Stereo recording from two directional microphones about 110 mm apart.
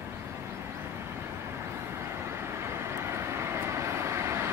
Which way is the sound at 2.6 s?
25° right (ahead or behind).